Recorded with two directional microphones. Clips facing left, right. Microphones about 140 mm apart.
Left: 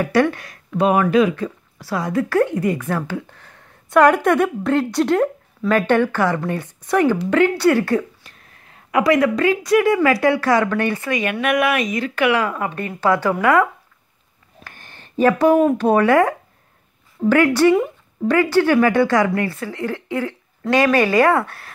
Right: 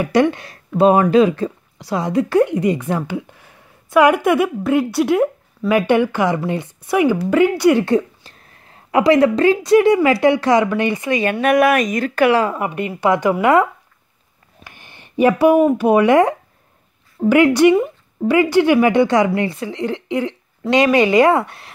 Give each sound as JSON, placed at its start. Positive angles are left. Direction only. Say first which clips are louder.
{"t": 0.0, "sound": "speech", "louder": "right 2 dB", "side_deg": -20}
{"t": 1.8, "sound": "speech", "louder": "right 3 dB", "side_deg": -20}
{"t": 11.1, "sound": "speech", "louder": "right 6 dB", "side_deg": -30}
{"t": 12.5, "sound": "speech", "louder": "right 3 dB", "side_deg": -20}